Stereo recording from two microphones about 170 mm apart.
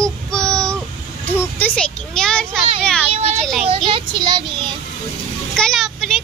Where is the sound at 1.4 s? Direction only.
10° left (ahead or behind).